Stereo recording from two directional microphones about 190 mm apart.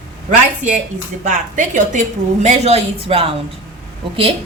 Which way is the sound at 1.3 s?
40° right (ahead or behind).